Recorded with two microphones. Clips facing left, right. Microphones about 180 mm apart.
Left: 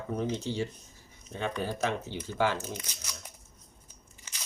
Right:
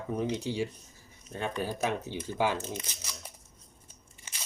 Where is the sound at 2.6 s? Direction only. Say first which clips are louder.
Right 1 dB; 25° right (ahead or behind).